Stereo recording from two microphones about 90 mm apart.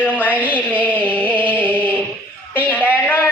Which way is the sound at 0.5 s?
15° left (ahead or behind).